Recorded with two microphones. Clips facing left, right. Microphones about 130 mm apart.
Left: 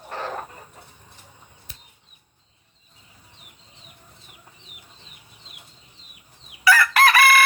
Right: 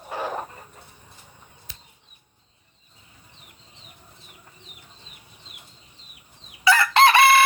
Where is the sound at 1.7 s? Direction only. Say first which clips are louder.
Right 2 dB; 90° right.